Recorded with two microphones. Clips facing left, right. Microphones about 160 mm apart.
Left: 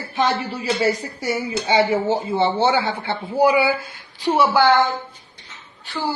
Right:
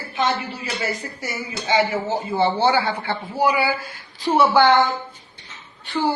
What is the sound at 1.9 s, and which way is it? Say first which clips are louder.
Speech: left 2 dB; 30° left (ahead or behind).